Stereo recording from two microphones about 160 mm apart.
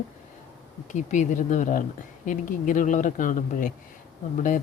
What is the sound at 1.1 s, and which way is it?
Speech, 50° left (ahead or behind).